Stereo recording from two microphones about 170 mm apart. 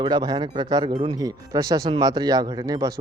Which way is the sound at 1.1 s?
20° right (ahead or behind).